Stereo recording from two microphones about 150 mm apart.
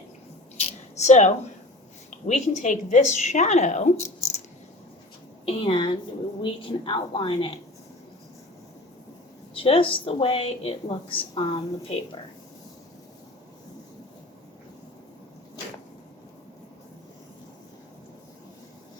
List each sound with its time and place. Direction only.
0.9 s a woman's voice: 50° left (ahead or behind)
5.5 s a woman's voice: 35° left (ahead or behind)
9.6 s a woman's voice: 35° left (ahead or behind)